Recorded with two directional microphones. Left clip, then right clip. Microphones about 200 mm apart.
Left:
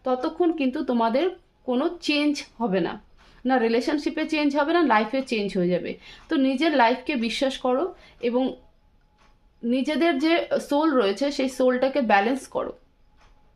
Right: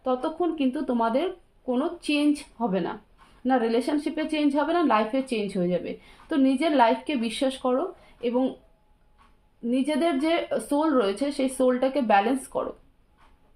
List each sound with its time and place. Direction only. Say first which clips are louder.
0.0 s a woman's voice: left 3 dB; 30° left (ahead or behind)
9.6 s a woman's voice: left 2 dB; 30° left (ahead or behind)